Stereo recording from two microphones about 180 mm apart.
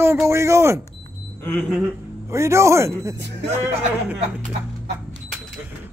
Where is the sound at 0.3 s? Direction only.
15° right (ahead or behind).